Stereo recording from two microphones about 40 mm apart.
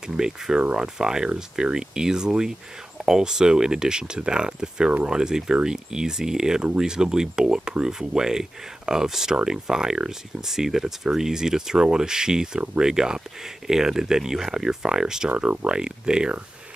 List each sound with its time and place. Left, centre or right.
0.0 s speech: centre
15.2 s speech: right